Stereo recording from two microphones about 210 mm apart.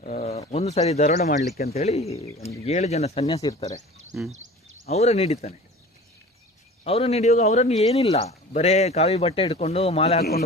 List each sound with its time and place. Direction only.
0.0 s speech: 35° left (ahead or behind)
3.2 s speech: 20° left (ahead or behind)
4.9 s speech: 30° left (ahead or behind)
6.8 s speech: 30° left (ahead or behind)